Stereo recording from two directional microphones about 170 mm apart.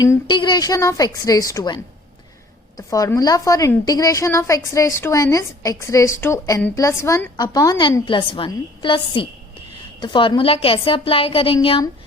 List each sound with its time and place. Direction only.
0.0 s a woman's voice: 25° left (ahead or behind)